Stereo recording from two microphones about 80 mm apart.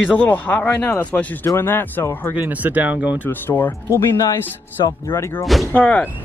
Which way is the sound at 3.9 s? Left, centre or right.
Left.